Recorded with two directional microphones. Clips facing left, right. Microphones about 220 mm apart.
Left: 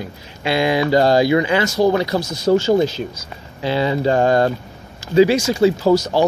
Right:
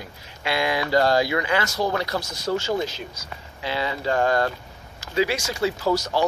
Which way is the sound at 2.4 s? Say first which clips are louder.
Left 10 dB; 30° left (ahead or behind).